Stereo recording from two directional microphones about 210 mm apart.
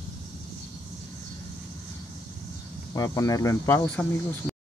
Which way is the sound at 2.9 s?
15° left (ahead or behind).